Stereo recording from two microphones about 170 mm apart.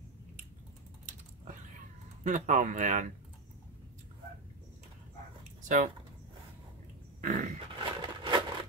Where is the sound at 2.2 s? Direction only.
50° right (ahead or behind).